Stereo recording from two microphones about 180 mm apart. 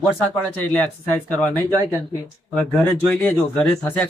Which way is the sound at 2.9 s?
10° left (ahead or behind).